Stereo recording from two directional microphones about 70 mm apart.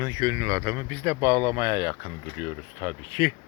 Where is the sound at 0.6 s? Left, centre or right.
Right.